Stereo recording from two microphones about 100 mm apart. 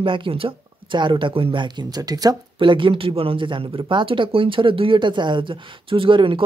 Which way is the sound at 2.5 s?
60° right (ahead or behind).